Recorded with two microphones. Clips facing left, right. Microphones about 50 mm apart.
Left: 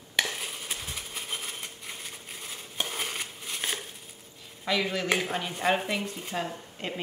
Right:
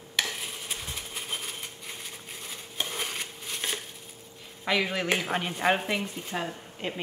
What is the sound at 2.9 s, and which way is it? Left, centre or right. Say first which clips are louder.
Crushing: even; centre.